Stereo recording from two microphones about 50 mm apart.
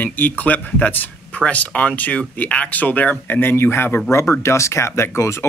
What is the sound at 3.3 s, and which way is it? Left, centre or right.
Speech, left.